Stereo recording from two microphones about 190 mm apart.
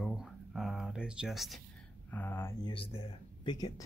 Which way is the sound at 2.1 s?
10° left (ahead or behind).